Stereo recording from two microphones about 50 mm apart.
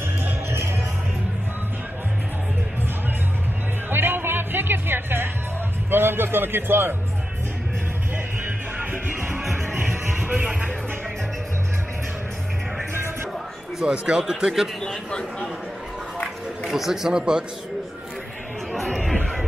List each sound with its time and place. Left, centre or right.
0.2 s music: right
3.9 s music: right
5.9 s a man's voice: right
8.9 s music: right
9.4 s music: centre
10.1 s music: right
13.8 s speech: centre
14.8 s a man's voice: centre
16.7 s speech: centre
18.7 s chatter: centre